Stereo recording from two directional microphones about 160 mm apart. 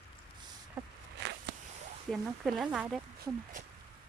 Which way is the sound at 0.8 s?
15° right (ahead or behind).